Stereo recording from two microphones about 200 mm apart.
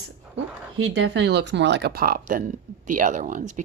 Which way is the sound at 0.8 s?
60° right (ahead or behind).